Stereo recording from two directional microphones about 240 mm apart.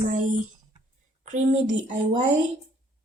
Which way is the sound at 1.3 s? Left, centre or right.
Right.